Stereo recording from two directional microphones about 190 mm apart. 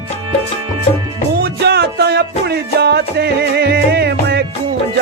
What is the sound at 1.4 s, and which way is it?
Music, 60° right (ahead or behind).